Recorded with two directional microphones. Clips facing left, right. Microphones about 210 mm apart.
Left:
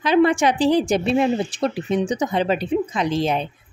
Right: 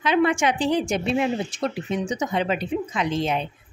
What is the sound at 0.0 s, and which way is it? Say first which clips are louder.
A woman's voice: left 4 dB; 35° left (ahead or behind).